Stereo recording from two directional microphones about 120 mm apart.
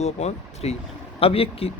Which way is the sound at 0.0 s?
65° left (ahead or behind).